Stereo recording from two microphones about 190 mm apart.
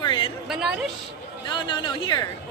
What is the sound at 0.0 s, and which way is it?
Chatter, 25° left (ahead or behind).